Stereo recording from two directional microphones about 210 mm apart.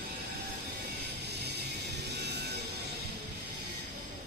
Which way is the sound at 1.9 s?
55° right (ahead or behind).